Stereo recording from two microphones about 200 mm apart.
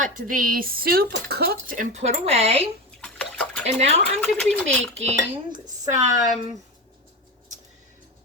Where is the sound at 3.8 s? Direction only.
35° right (ahead or behind).